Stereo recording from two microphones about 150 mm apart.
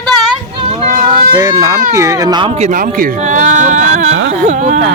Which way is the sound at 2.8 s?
65° right (ahead or behind).